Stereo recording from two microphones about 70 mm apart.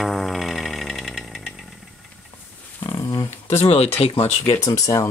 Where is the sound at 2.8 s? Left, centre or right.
Left.